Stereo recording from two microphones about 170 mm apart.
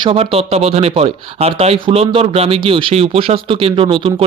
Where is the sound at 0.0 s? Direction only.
35° right (ahead or behind).